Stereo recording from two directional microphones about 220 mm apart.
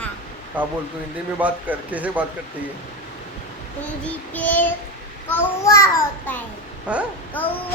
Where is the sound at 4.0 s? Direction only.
5° left (ahead or behind).